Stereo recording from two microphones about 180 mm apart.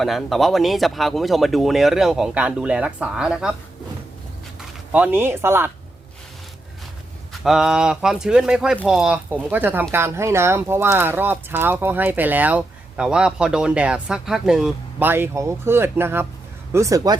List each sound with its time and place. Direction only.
0.0 s speech: centre (ahead or behind)
4.9 s speech: 10° right (ahead or behind)
7.4 s speech: centre (ahead or behind); by 17.2 s 20° right (ahead or behind)